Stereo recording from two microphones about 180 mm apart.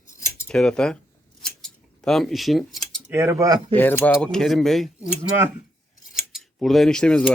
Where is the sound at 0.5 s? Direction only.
5° left (ahead or behind).